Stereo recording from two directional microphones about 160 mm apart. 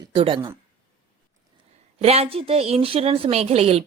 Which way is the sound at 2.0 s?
40° right (ahead or behind).